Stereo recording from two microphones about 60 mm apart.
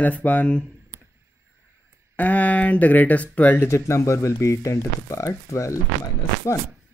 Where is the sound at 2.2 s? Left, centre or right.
Left.